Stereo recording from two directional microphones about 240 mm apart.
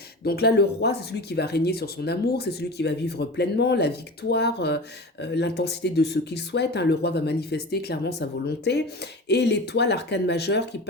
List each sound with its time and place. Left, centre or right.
0.3 s speech: left